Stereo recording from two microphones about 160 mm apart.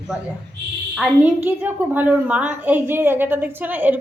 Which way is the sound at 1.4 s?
10° right (ahead or behind).